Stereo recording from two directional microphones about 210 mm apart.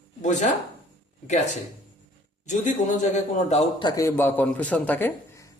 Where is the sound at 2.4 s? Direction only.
35° left (ahead or behind).